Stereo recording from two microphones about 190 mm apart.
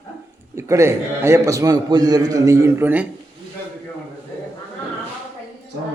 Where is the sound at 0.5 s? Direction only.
15° right (ahead or behind).